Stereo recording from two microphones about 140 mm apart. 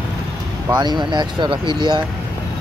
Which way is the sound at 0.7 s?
30° right (ahead or behind).